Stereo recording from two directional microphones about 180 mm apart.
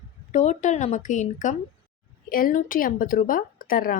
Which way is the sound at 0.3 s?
40° left (ahead or behind).